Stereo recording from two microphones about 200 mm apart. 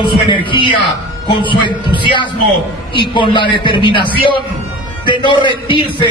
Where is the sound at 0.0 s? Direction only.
25° left (ahead or behind).